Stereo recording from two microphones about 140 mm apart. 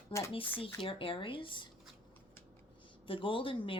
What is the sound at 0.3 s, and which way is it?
Speech, 40° left (ahead or behind).